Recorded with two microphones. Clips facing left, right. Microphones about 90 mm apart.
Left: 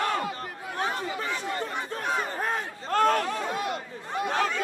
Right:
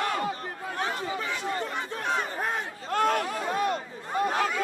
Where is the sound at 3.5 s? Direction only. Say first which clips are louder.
Right 3 dB; 40° right (ahead or behind).